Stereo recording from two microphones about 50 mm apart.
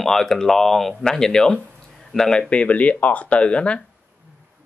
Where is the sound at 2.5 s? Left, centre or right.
Left.